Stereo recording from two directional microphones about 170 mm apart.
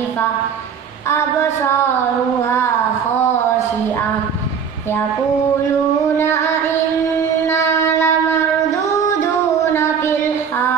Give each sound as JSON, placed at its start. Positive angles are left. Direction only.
{"t": 1.0, "sound": "a sound", "side_deg": 15}
{"t": 6.1, "sound": "music", "side_deg": 15}
{"t": 7.4, "sound": "shofar", "side_deg": 15}
{"t": 8.9, "sound": "music", "side_deg": 15}